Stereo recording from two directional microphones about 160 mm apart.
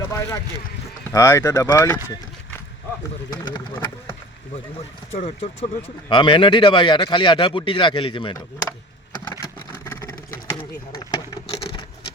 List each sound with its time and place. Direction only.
0.1 s speech: 15° left (ahead or behind)
5.1 s speech: 40° left (ahead or behind)
9.3 s vehicle: 20° left (ahead or behind)